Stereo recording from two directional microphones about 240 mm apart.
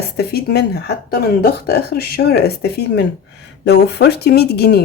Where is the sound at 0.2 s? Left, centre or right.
Left.